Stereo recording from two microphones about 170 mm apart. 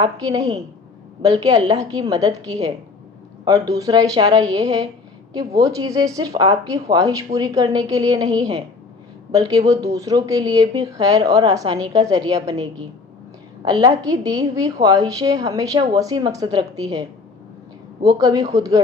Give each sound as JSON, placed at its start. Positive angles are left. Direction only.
{"t": 0.0, "sound": "a woman's voice", "side_deg": -20}
{"t": 13.6, "sound": "a woman's voice", "side_deg": -25}